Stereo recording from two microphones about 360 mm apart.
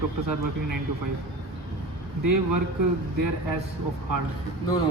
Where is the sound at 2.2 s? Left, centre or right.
Right.